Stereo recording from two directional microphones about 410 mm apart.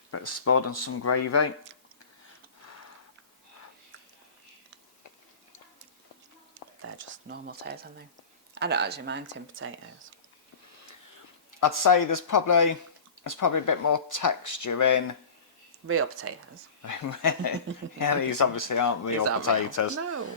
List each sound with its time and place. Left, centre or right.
0.4 s speech: left
6.8 s a sound: right
7.3 s speech: right
11.6 s speech: left
15.9 s speech: right
16.8 s speech: left